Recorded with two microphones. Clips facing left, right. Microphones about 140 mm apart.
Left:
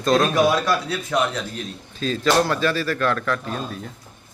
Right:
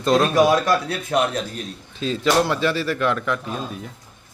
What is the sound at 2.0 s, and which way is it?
A man's voice, 20° right (ahead or behind).